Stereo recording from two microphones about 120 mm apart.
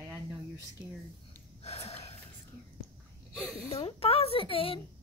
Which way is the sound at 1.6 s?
60° left (ahead or behind).